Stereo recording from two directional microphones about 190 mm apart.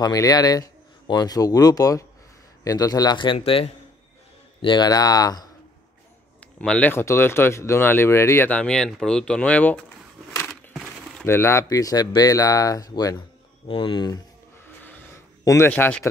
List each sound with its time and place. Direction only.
0.0 s speech: 20° left (ahead or behind)
6.6 s speech: 5° left (ahead or behind)
10.5 s crushing: centre (ahead or behind)
11.2 s speech: 15° left (ahead or behind)
14.8 s a sound: 10° left (ahead or behind)